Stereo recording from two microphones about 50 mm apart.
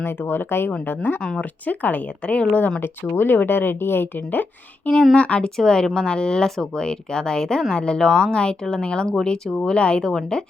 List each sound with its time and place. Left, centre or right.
0.2 s speech: left
2.8 s speech: left
5.1 s speech: left
5.5 s speech: centre